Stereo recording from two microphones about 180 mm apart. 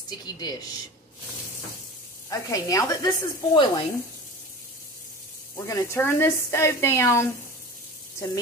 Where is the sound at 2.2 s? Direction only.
20° left (ahead or behind).